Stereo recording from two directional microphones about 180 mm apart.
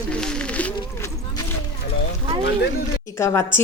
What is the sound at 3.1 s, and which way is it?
Speech, 15° left (ahead or behind).